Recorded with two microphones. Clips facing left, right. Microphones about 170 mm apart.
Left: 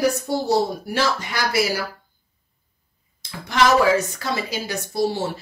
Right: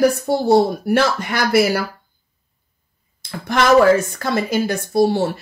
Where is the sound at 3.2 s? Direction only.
50° right (ahead or behind).